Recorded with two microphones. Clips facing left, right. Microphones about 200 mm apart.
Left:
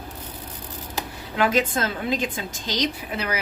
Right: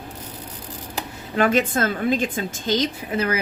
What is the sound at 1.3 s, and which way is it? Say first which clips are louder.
A woman's voice: right 2 dB; 50° right (ahead or behind).